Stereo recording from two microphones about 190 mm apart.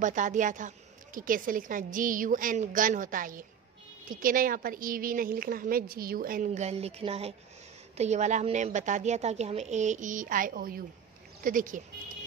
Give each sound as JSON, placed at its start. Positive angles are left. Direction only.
{"t": 0.0, "sound": "a woman's voice", "side_deg": -40}